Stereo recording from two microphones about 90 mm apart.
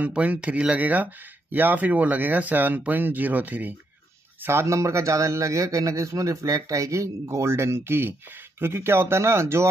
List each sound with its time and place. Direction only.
0.0 s speech: 15° right (ahead or behind)
4.4 s speech: 30° right (ahead or behind)